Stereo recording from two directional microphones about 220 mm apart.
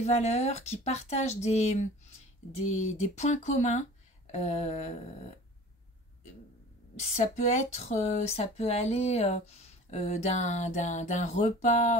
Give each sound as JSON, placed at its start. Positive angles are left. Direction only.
{"t": 0.0, "sound": "speech", "side_deg": 30}
{"t": 7.0, "sound": "speech", "side_deg": 30}